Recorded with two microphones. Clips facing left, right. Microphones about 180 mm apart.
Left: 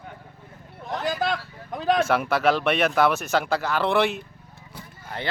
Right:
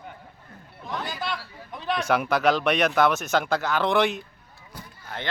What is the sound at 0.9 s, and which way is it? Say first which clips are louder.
Speech: left 6 dB; 45° left (ahead or behind).